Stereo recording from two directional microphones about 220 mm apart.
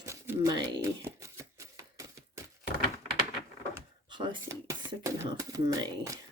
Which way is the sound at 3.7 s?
20° right (ahead or behind).